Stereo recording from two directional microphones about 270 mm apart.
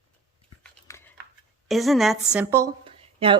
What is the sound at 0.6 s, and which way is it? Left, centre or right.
Biting, centre.